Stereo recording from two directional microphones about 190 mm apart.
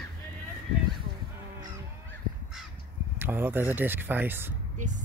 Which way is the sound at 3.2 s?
10° right (ahead or behind).